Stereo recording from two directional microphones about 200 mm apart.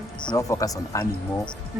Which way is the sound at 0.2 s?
20° left (ahead or behind).